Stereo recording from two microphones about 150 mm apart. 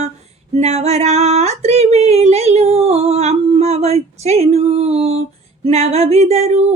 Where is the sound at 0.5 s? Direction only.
45° right (ahead or behind).